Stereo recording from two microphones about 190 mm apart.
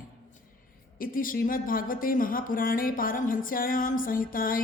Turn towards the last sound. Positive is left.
turn(degrees=50)  # may be behind; listen again after turning